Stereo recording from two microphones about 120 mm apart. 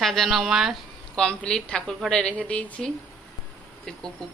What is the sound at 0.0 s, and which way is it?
Speech, centre (ahead or behind).